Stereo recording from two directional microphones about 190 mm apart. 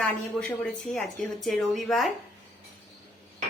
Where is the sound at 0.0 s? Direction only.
5° left (ahead or behind).